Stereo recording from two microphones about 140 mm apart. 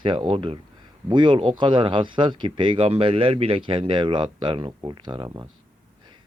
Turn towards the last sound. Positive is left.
turn(degrees=-25)  # may be behind; listen again after turning